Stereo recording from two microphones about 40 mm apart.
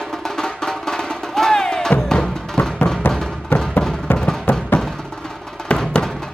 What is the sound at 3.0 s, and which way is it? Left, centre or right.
Music, left.